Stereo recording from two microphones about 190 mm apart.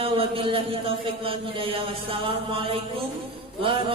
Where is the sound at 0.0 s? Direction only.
30° right (ahead or behind).